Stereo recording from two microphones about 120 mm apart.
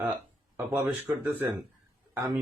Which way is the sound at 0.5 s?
20° right (ahead or behind).